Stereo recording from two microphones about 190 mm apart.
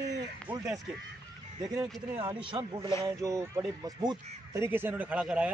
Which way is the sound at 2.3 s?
25° right (ahead or behind).